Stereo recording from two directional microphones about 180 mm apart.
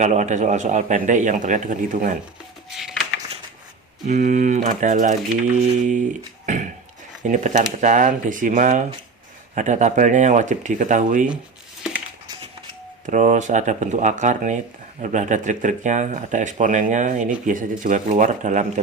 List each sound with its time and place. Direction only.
0.0 s speech: 40° right (ahead or behind)
2.6 s a sound: centre (ahead or behind)
4.0 s speech: 45° right (ahead or behind)
6.4 s a sound: 45° right (ahead or behind)
7.2 s speech: 45° right (ahead or behind)
13.1 s speech: 45° right (ahead or behind)